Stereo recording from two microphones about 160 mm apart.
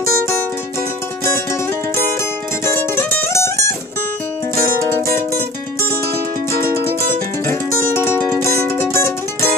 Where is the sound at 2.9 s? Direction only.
15° left (ahead or behind).